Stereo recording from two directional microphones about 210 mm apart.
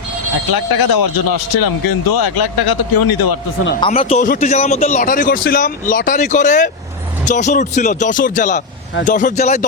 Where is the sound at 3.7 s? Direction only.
25° left (ahead or behind).